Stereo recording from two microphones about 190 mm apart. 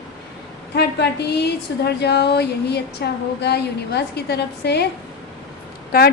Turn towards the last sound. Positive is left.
turn(degrees=50)  # may be behind; listen again after turning